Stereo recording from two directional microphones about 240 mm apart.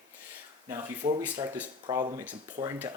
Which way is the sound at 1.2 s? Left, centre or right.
Centre.